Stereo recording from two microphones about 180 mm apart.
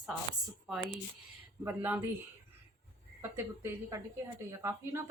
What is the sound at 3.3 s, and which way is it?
Speech, 15° right (ahead or behind).